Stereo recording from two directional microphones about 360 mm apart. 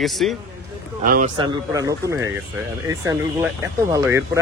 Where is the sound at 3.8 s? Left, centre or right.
Centre.